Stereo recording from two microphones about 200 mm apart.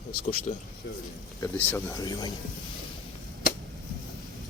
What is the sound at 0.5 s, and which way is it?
Speech, 35° left (ahead or behind).